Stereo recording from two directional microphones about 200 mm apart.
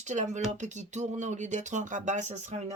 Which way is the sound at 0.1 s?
35° right (ahead or behind).